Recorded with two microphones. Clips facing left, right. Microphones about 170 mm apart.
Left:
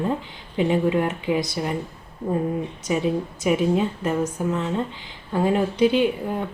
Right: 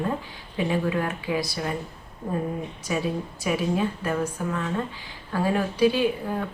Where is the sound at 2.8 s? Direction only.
20° left (ahead or behind).